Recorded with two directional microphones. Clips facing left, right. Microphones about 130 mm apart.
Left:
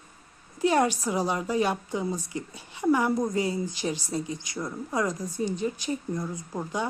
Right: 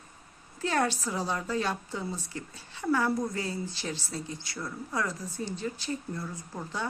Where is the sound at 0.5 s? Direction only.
15° left (ahead or behind).